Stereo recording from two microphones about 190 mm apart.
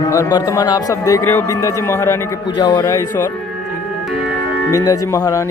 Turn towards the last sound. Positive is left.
turn(degrees=20)  # may be behind; listen again after turning